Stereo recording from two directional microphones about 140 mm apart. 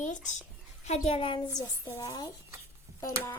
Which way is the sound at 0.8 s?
50° left (ahead or behind).